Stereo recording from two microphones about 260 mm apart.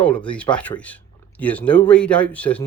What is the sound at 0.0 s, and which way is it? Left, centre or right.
Speech, centre.